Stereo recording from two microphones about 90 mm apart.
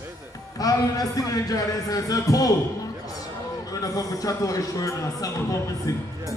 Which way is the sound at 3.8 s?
40° left (ahead or behind).